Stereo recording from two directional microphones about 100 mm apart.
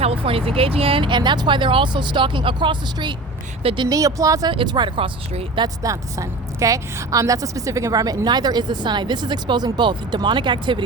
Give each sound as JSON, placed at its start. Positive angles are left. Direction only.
{"t": 0.0, "sound": "speech", "side_deg": -75}
{"t": 3.6, "sound": "speech", "side_deg": -70}
{"t": 3.8, "sound": "speech", "side_deg": -35}
{"t": 4.5, "sound": "speech", "side_deg": -50}
{"t": 5.5, "sound": "a woman's voice", "side_deg": -35}